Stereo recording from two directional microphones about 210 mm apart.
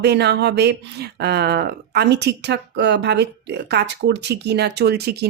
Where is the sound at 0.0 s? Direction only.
50° right (ahead or behind).